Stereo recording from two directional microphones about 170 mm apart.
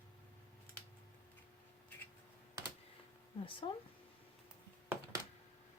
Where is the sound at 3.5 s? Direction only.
30° left (ahead or behind).